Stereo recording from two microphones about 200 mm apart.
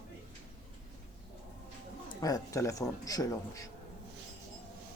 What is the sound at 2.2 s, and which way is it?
A man's voice, 15° left (ahead or behind).